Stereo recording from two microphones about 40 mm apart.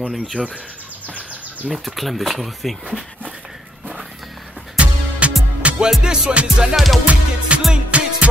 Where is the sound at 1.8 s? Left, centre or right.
Centre.